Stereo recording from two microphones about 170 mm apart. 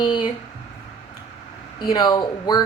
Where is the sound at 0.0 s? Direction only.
30° left (ahead or behind).